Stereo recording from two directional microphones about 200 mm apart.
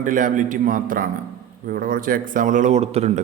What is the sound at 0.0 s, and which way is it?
A man's voice, 40° right (ahead or behind).